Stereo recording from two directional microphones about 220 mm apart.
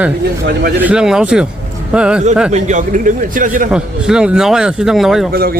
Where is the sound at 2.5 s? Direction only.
35° right (ahead or behind).